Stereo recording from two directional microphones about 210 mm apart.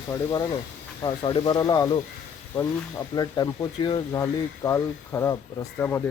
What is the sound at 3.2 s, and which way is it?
Speech, 20° left (ahead or behind).